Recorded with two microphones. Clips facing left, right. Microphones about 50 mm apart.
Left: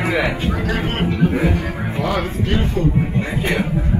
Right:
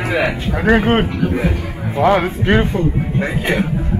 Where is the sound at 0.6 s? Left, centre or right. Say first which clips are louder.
Right 8 dB; right.